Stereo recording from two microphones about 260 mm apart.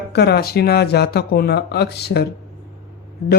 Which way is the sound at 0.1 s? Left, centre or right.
Left.